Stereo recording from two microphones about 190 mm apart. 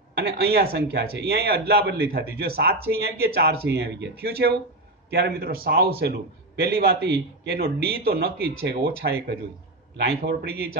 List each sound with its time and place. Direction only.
0.2 s a man's voice: 55° right (ahead or behind)